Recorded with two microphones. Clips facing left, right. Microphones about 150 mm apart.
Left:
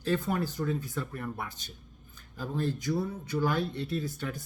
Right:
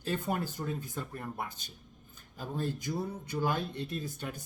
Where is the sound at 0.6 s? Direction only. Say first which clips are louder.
Left 5 dB; 25° right (ahead or behind).